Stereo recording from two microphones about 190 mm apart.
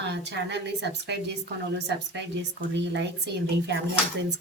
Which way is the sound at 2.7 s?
65° right (ahead or behind).